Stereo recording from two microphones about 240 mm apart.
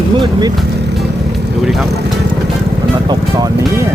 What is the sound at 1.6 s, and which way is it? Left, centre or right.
Speech, centre.